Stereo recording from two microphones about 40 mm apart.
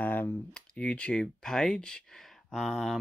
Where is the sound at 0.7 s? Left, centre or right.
Left.